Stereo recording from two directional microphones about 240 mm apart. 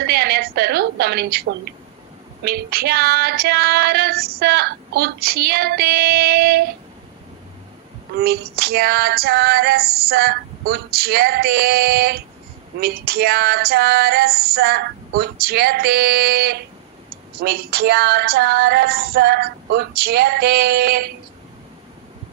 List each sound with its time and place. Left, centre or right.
0.0 s a sound: right
2.4 s female singing: right
8.2 s female singing: right